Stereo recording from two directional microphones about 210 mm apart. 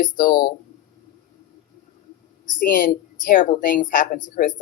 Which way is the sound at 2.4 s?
40° left (ahead or behind).